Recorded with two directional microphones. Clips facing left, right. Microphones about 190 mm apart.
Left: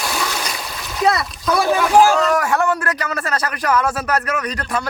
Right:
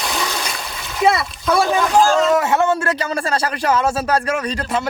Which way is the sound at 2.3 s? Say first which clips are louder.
Right 2 dB; 25° right (ahead or behind).